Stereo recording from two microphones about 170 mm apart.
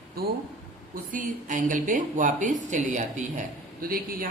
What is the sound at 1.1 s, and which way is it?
Speech, 50° right (ahead or behind).